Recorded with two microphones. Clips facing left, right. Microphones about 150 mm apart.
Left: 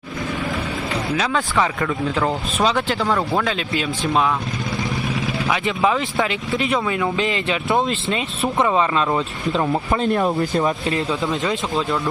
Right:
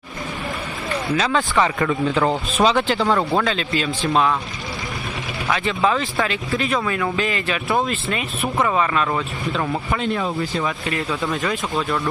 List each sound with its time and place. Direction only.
1.1 s speech: 5° left (ahead or behind)
5.6 s speech: 15° left (ahead or behind)
10.0 s speech: 50° left (ahead or behind)
10.6 s speech: 25° left (ahead or behind)